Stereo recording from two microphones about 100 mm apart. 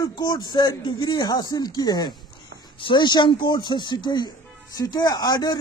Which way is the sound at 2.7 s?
55° left (ahead or behind).